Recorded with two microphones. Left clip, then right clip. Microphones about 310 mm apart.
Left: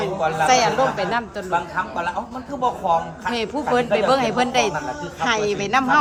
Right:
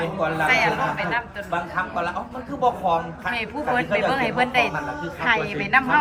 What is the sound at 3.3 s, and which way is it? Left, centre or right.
A woman's voice, centre.